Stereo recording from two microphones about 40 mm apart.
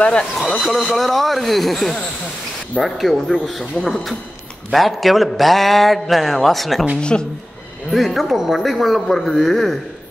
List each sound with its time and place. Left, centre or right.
0.4 s a man's voice: centre
7.0 s speech: left
7.9 s a man's voice: centre